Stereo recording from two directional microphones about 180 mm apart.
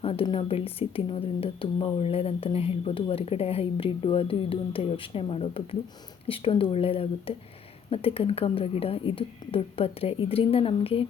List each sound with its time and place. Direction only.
0.0 s speech: 30° left (ahead or behind)